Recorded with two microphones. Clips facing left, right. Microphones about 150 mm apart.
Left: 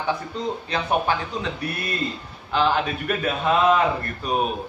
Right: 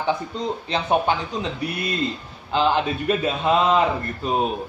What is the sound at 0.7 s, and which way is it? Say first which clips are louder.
Speech: right 3 dB; 25° right (ahead or behind).